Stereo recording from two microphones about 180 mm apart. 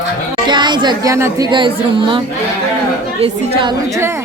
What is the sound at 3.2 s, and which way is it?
Speech, 30° right (ahead or behind).